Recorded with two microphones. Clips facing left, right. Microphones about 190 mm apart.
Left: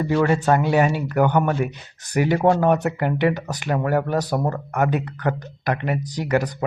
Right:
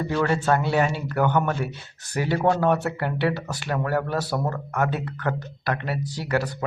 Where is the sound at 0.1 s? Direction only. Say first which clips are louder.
Left 4 dB; 10° left (ahead or behind).